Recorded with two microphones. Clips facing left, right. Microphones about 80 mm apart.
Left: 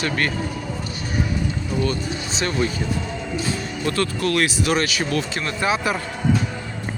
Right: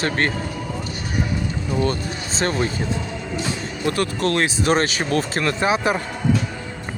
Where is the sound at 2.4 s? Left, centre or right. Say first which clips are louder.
Right 1 dB; right.